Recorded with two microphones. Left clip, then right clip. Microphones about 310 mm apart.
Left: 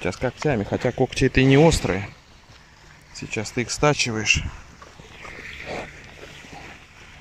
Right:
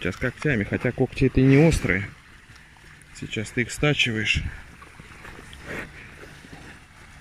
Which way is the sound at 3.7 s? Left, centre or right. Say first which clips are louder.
Left 2 dB; left.